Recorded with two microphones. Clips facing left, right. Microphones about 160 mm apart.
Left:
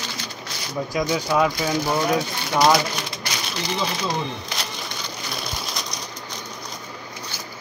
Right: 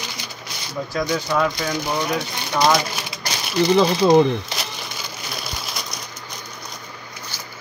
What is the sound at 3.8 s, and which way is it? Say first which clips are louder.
Speech: right 12 dB; 70° right (ahead or behind).